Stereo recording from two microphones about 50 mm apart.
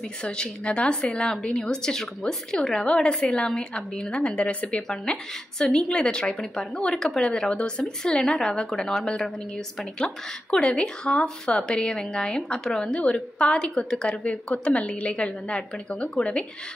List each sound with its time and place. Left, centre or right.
0.2 s a woman's voice: left